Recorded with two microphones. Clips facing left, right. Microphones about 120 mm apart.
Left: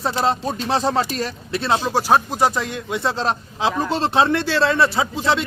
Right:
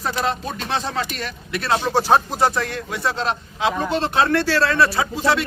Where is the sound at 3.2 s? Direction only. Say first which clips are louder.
Left 1 dB; 35° left (ahead or behind).